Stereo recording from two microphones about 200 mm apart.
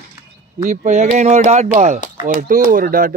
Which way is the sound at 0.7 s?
35° right (ahead or behind).